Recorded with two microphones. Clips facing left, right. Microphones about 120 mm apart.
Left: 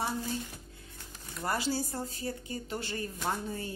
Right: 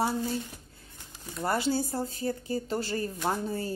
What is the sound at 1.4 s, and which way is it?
Speech, 25° right (ahead or behind).